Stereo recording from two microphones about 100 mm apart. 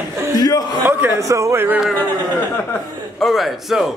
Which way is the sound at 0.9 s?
25° right (ahead or behind).